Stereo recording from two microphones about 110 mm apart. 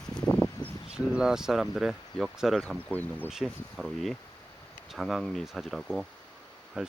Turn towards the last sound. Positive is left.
turn(degrees=-10)  # may be behind; listen again after turning